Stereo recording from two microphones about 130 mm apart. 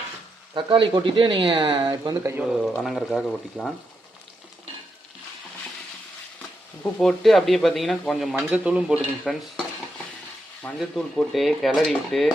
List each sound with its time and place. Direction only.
0.5 s speech: 40° right (ahead or behind)
2.4 s speech: 5° right (ahead or behind)
7.0 s speech: centre (ahead or behind)
9.3 s speech: 5° left (ahead or behind)
10.8 s speech: centre (ahead or behind)